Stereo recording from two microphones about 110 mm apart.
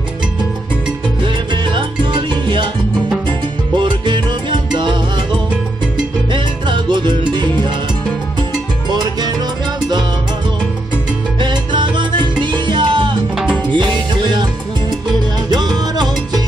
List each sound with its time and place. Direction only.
1.2 s salsa music: 45° right (ahead or behind)
6.3 s music: 45° right (ahead or behind)
8.9 s music: 40° right (ahead or behind)
11.3 s salsa music: 45° right (ahead or behind)
13.7 s music: 45° right (ahead or behind)
15.5 s salsa music: 40° right (ahead or behind)